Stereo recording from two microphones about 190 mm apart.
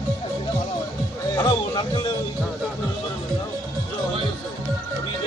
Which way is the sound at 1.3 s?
25° left (ahead or behind).